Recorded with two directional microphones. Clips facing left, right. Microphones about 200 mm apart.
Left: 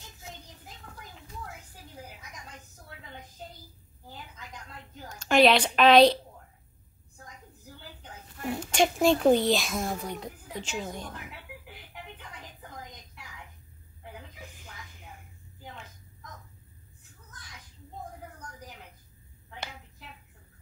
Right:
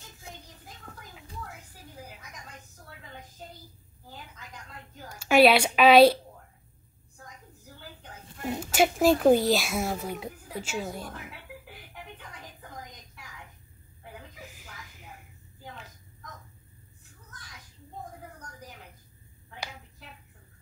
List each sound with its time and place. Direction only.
5.0 s a woman's voice: 10° right (ahead or behind)
8.5 s a child's voice: 5° right (ahead or behind)
14.4 s a sound: centre (ahead or behind)